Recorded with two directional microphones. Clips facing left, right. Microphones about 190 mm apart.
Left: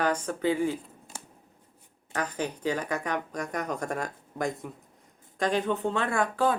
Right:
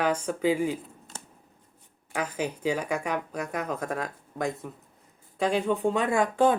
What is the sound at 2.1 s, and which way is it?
Speech, 10° right (ahead or behind).